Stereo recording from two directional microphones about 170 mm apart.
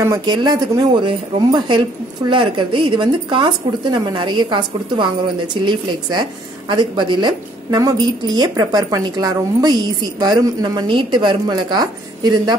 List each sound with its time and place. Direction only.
0.0 s a woman's voice: 20° right (ahead or behind)